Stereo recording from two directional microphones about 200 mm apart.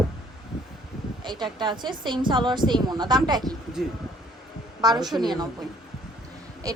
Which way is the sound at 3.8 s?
Centre (ahead or behind).